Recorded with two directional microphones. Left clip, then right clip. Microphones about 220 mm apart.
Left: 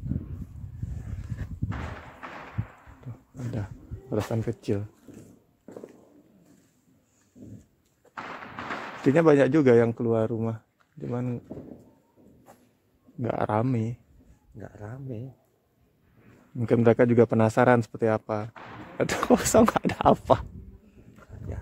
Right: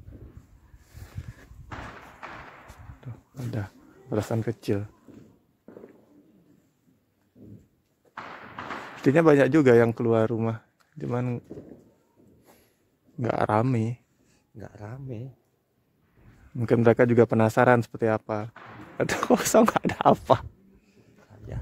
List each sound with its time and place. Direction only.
3.3 s speech: 20° right (ahead or behind)
9.0 s speech: 20° right (ahead or behind); by 11.4 s 35° right (ahead or behind)
13.2 s speech: 25° right (ahead or behind)
14.6 s speech: 40° right (ahead or behind)
16.5 s speech: 20° right (ahead or behind)